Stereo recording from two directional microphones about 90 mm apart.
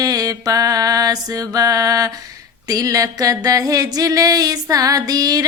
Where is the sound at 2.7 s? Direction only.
40° right (ahead or behind).